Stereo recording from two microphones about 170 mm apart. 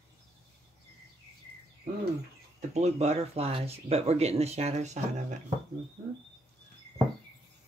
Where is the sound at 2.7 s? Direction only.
40° right (ahead or behind).